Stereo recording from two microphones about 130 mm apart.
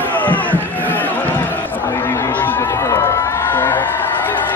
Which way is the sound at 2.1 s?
20° left (ahead or behind).